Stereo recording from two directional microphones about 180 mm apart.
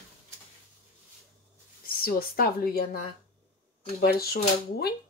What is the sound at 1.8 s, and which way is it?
Speech, 55° left (ahead or behind).